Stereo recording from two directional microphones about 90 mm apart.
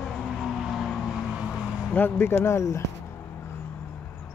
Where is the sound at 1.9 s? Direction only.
25° left (ahead or behind).